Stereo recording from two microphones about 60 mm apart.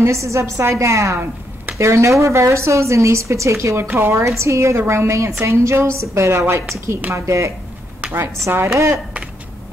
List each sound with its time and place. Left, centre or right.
0.0 s a woman's voice: right
6.4 s speech: right
7.1 s a woman's voice: right
8.1 s speech: right
8.7 s a woman's voice: right